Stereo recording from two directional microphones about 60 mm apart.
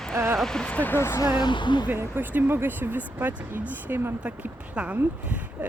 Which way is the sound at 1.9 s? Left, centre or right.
Right.